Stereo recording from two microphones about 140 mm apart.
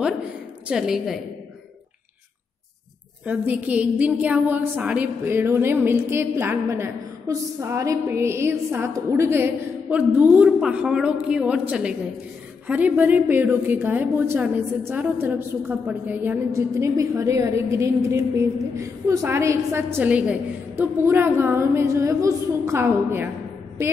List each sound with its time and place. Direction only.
0.7 s a woman's voice: 5° right (ahead or behind)
3.3 s a woman's voice: 10° right (ahead or behind)